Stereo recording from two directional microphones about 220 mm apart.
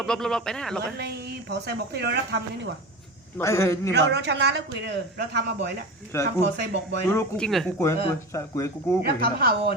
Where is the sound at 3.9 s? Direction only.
50° right (ahead or behind).